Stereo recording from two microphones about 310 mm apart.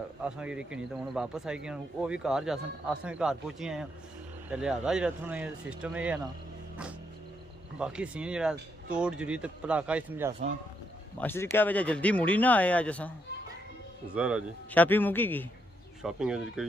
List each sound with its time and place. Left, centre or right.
0.2 s speech: centre
7.8 s speech: centre
11.1 s speech: centre
14.1 s speech: centre